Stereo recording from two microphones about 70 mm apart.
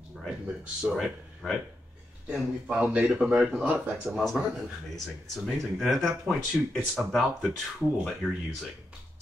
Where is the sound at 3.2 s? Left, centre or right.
Centre.